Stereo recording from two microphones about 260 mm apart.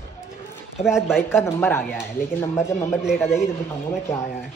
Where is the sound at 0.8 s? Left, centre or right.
Centre.